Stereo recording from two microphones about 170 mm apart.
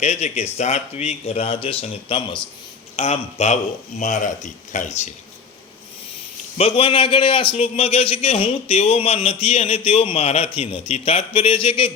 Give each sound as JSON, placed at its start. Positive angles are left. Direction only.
{"t": 0.0, "sound": "a man's voice", "side_deg": 40}
{"t": 6.6, "sound": "a man's voice", "side_deg": 35}